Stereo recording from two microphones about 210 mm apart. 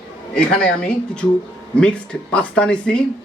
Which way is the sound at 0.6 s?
5° left (ahead or behind).